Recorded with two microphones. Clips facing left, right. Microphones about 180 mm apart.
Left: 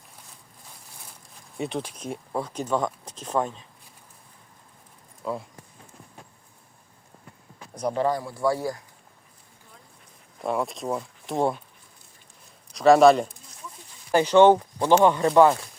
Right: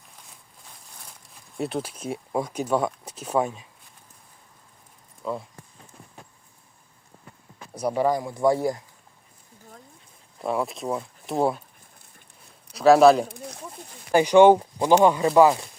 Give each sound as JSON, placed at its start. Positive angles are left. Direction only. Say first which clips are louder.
{"t": 1.5, "sound": "speech", "louder": "right 1 dB", "side_deg": 0}
{"t": 5.2, "sound": "speech", "louder": "even", "side_deg": 0}
{"t": 7.8, "sound": "speech", "louder": "right 2 dB", "side_deg": -10}
{"t": 10.4, "sound": "speech", "louder": "right 1 dB", "side_deg": 0}
{"t": 12.7, "sound": "speech", "louder": "right 1 dB", "side_deg": 0}
{"t": 13.2, "sound": "a sound", "louder": "right 9 dB", "side_deg": -70}
{"t": 14.1, "sound": "speech", "louder": "right 2 dB", "side_deg": -15}